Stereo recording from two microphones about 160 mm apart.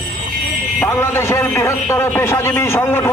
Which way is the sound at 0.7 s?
15° left (ahead or behind).